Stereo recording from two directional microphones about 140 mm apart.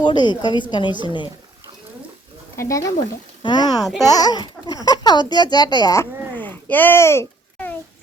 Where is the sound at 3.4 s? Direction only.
30° left (ahead or behind).